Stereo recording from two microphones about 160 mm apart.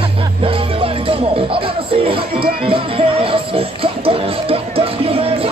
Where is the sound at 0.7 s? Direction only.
35° right (ahead or behind).